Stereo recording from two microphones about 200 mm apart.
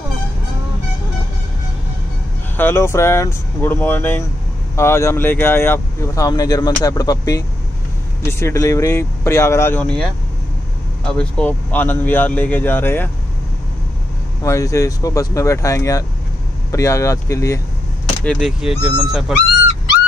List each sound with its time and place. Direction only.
2.5 s speech: 10° left (ahead or behind)
11.1 s speech: 5° left (ahead or behind)
14.4 s speech: 15° left (ahead or behind)
18.2 s speech: centre (ahead or behind)